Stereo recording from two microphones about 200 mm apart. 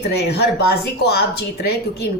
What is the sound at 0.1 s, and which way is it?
A woman's voice, 55° left (ahead or behind).